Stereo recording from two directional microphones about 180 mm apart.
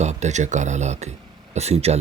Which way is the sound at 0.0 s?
40° right (ahead or behind).